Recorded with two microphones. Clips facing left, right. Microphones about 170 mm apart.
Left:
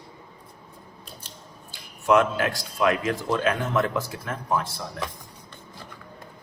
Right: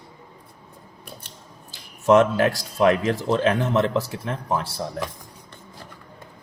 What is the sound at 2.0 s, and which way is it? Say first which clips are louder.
A man's voice: right 4 dB; 40° right (ahead or behind).